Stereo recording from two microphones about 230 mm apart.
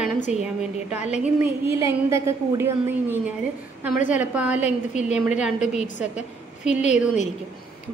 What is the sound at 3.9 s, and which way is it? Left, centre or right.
Speech, left.